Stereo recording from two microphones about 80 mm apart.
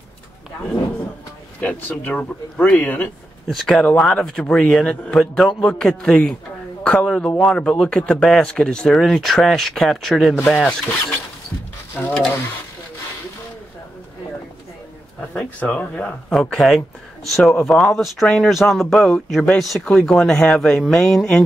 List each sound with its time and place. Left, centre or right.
1.6 s speech: centre
3.4 s speech: centre
3.8 s a man's voice: centre
15.6 s speech: centre
16.3 s speech: centre